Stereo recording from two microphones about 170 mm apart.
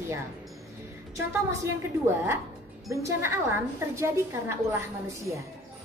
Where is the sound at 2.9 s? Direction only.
15° right (ahead or behind).